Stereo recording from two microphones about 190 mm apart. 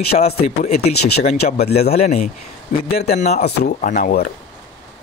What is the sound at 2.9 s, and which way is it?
Speech, 55° left (ahead or behind).